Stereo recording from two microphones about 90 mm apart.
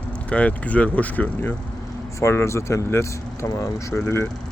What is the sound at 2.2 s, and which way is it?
Speech, 30° left (ahead or behind).